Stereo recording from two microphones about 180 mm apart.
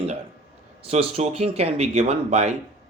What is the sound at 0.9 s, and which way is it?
Speech, 35° right (ahead or behind).